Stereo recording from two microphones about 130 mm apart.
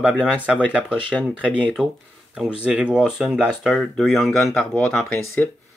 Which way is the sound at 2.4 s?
5° right (ahead or behind).